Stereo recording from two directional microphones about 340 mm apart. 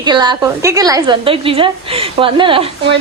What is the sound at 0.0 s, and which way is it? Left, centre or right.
A woman's voice, centre.